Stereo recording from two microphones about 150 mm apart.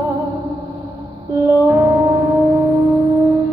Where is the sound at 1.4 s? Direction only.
20° right (ahead or behind).